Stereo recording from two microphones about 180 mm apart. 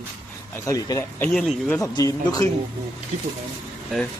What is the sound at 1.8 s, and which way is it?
Speech, 20° left (ahead or behind).